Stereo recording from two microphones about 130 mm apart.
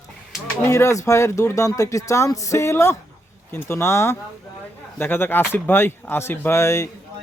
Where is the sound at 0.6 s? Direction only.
20° left (ahead or behind).